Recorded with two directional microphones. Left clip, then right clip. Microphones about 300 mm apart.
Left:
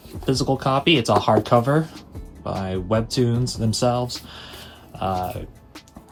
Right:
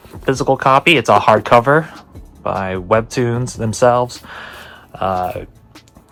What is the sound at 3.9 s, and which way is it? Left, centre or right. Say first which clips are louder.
Speech: right 9 dB; centre.